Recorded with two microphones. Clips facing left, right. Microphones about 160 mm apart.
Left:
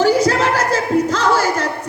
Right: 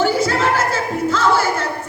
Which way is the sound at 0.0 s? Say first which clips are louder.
Left 3 dB; 40° left (ahead or behind).